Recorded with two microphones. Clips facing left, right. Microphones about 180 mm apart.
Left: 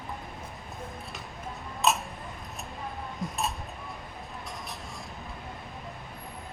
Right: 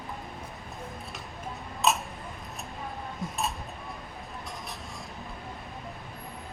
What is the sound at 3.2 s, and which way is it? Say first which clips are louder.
Speech: left 2 dB; centre (ahead or behind).